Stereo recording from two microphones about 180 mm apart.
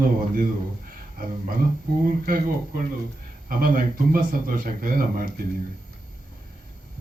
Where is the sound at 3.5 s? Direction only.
50° right (ahead or behind).